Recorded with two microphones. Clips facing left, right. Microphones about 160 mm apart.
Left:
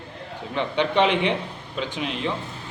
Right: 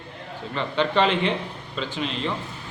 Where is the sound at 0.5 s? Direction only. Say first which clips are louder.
Left 1 dB; 15° left (ahead or behind).